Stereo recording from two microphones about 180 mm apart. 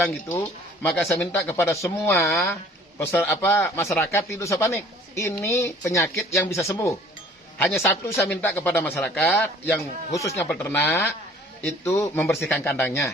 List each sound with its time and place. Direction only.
0.1 s speech: 10° left (ahead or behind)